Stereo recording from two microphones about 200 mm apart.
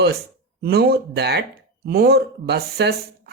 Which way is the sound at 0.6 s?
50° right (ahead or behind).